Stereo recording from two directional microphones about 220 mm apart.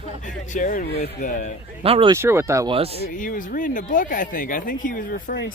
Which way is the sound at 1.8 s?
25° right (ahead or behind).